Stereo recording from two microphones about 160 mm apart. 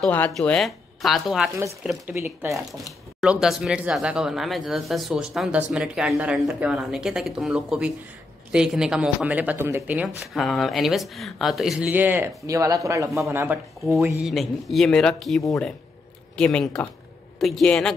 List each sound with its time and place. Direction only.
0.0 s speech: 10° left (ahead or behind)
2.1 s speech: 15° right (ahead or behind)
3.2 s speech: 5° right (ahead or behind)
14.2 s speech: centre (ahead or behind)